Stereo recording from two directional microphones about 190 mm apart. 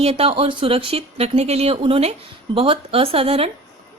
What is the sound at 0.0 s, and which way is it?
A woman's voice, 30° right (ahead or behind).